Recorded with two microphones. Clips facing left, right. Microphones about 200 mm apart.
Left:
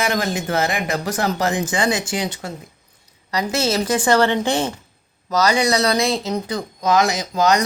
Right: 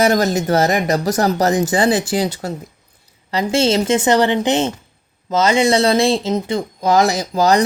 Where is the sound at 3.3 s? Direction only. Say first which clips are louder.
Right 5 dB; 30° right (ahead or behind).